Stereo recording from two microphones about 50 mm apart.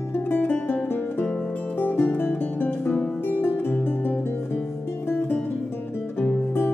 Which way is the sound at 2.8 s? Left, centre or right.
Left.